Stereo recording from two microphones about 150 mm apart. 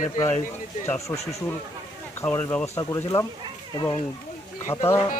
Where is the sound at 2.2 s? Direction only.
15° left (ahead or behind).